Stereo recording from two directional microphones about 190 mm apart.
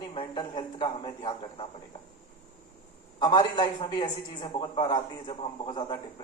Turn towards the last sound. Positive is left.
turn(degrees=25)  # may be behind; listen again after turning